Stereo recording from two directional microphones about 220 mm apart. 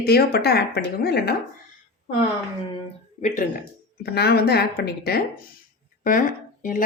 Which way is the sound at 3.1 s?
35° left (ahead or behind).